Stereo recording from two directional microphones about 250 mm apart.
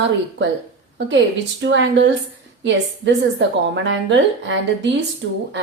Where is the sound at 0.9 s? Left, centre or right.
Right.